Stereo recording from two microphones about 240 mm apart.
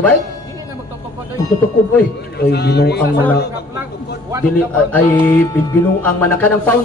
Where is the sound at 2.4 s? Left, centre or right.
Left.